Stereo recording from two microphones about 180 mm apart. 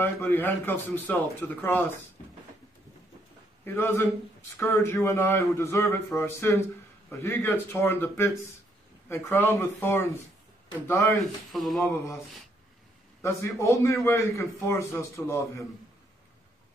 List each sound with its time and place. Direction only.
0.0 s speech: 10° left (ahead or behind)
3.6 s speech: 15° left (ahead or behind)
11.1 s speech: centre (ahead or behind)
13.2 s speech: 15° left (ahead or behind)